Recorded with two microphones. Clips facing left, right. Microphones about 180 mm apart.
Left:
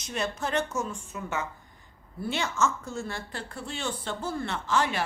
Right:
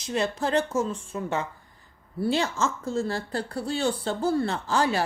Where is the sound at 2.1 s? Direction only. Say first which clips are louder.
Right 4 dB; 35° right (ahead or behind).